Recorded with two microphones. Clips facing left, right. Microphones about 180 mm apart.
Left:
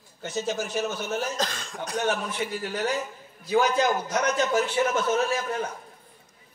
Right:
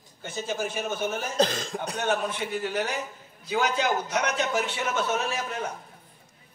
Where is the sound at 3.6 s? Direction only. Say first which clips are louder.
Left 2 dB; 65° right (ahead or behind).